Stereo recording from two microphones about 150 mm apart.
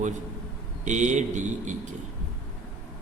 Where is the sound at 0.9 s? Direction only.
55° right (ahead or behind).